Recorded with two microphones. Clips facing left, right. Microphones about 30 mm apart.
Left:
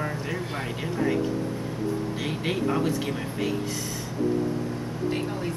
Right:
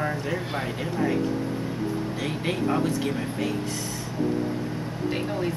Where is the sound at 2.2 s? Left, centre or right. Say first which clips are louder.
Right 1 dB; centre.